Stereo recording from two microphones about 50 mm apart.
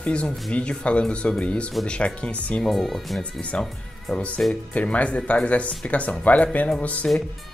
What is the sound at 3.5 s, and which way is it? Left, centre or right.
Speech, left.